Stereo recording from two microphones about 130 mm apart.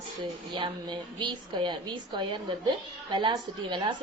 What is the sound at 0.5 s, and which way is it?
A woman's voice, 35° right (ahead or behind).